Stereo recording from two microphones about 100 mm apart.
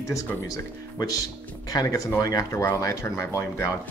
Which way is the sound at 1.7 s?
35° left (ahead or behind).